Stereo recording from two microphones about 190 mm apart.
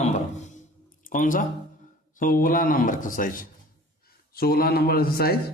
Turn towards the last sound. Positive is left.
turn(degrees=55)  # may be behind; listen again after turning